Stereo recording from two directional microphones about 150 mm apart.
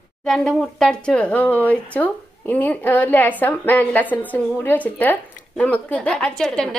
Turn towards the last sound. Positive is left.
turn(degrees=5)  # may be behind; listen again after turning